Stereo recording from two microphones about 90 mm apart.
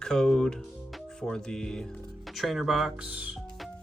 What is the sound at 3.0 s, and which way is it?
Music, 15° right (ahead or behind).